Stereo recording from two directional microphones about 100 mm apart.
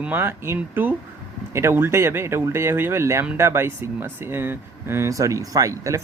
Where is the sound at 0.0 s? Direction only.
20° right (ahead or behind).